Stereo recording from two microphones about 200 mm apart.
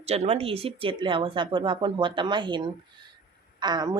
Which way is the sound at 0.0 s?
30° right (ahead or behind).